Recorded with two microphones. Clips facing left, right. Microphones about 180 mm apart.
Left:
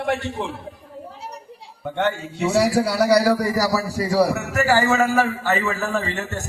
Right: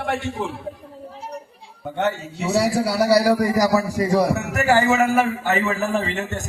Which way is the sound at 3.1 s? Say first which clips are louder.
Right 2 dB; 15° right (ahead or behind).